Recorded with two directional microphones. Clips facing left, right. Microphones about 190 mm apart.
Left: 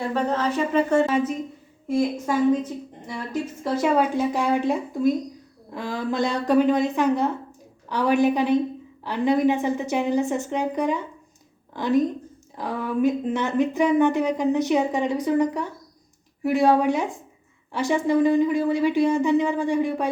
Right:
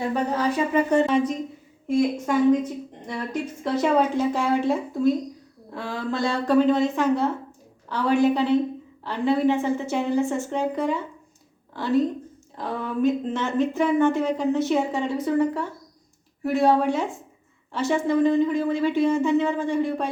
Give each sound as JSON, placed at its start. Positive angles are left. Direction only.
{"t": 0.3, "sound": "speech", "side_deg": -10}
{"t": 1.0, "sound": "a woman's voice", "side_deg": 5}
{"t": 3.6, "sound": "a woman's voice", "side_deg": 10}